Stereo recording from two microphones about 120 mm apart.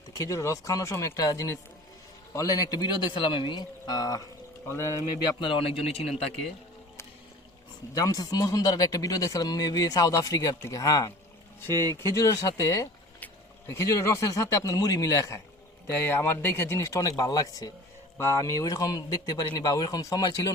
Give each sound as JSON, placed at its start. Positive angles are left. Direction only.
{"t": 0.2, "sound": "speech", "side_deg": 25}
{"t": 5.4, "sound": "a man's voice", "side_deg": 50}
{"t": 7.9, "sound": "speech", "side_deg": 30}
{"t": 13.1, "sound": "a sound", "side_deg": 15}
{"t": 13.7, "sound": "speech", "side_deg": 25}